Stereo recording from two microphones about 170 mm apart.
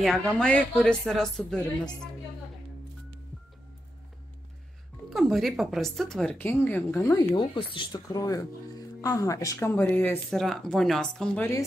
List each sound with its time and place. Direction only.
0.0 s a woman's voice: centre (ahead or behind)
5.1 s a woman's voice: centre (ahead or behind)
7.3 s speech: 30° left (ahead or behind); by 11.6 s 10° left (ahead or behind)